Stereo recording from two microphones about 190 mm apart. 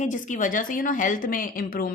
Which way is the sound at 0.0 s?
40° left (ahead or behind).